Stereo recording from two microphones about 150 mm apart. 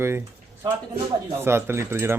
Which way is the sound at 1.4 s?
15° right (ahead or behind).